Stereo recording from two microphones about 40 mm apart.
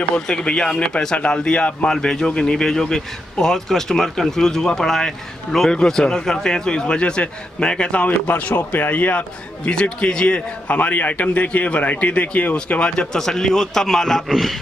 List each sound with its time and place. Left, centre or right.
0.3 s speech: centre
1.9 s a man's voice: centre
8.3 s speech: left
9.7 s a man's voice: left; by 14.2 s centre